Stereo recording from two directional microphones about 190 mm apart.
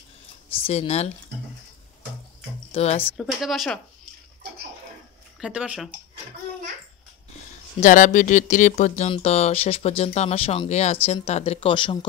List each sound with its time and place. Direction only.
0.7 s speech: 35° left (ahead or behind)
2.7 s speech: 35° left (ahead or behind)
3.2 s speech: centre (ahead or behind)
5.4 s speech: 5° right (ahead or behind)
7.8 s speech: 40° left (ahead or behind); by 12.1 s 25° left (ahead or behind)